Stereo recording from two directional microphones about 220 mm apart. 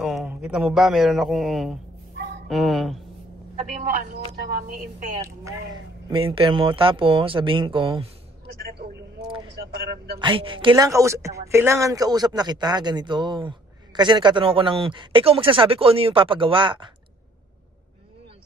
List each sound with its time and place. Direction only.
0.0 s a man's voice: centre (ahead or behind)
4.4 s a woman's voice: 40° right (ahead or behind)
6.0 s a woman's voice: 25° right (ahead or behind)
9.6 s speech: 45° right (ahead or behind)
10.1 s a woman's voice: 20° right (ahead or behind)